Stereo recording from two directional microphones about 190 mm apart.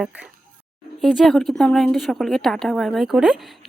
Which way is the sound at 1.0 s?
Centre (ahead or behind).